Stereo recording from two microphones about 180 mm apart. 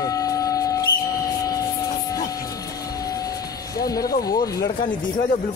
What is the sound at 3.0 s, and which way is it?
Vehicle, 20° left (ahead or behind).